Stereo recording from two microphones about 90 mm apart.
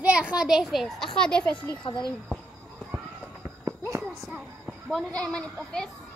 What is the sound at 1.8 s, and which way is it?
Speech, 60° left (ahead or behind).